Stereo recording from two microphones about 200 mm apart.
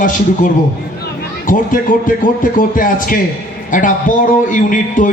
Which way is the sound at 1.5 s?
40° left (ahead or behind).